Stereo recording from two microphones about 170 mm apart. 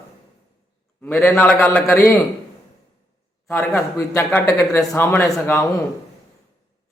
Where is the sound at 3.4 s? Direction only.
15° left (ahead or behind).